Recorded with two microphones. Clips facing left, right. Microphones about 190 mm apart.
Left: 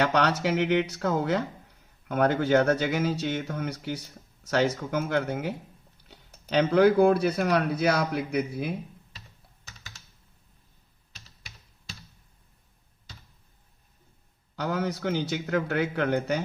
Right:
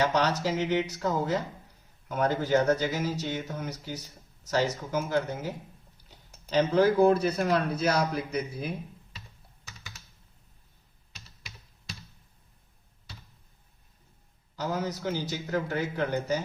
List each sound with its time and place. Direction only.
0.0 s speech: 60° left (ahead or behind)
14.5 s speech: 65° left (ahead or behind)